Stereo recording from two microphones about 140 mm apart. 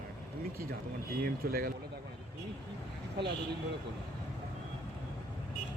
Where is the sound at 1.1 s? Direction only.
90° right.